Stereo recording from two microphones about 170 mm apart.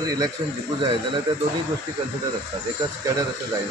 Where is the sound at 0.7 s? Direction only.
30° right (ahead or behind).